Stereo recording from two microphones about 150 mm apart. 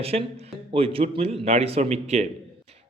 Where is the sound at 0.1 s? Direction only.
45° right (ahead or behind).